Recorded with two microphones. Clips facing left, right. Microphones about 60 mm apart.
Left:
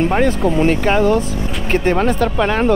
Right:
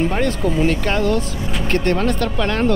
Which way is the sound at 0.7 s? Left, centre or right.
Centre.